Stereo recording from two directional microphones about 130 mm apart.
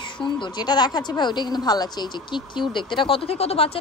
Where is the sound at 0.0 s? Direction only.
35° left (ahead or behind).